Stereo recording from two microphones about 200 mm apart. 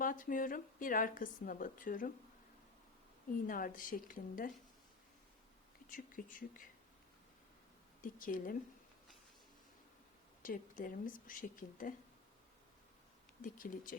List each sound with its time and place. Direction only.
0.0 s a woman's voice: 45° left (ahead or behind)
3.4 s a woman's voice: 45° left (ahead or behind)
5.9 s a woman's voice: 45° left (ahead or behind)
8.0 s a woman's voice: 45° left (ahead or behind)
10.4 s a woman's voice: 45° left (ahead or behind)
13.4 s a woman's voice: 45° left (ahead or behind)